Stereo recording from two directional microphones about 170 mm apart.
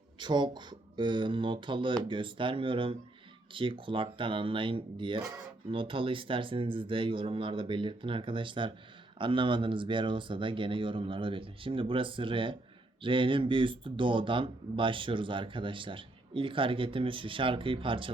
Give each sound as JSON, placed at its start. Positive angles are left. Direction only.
{"t": 0.2, "sound": "speech", "side_deg": -25}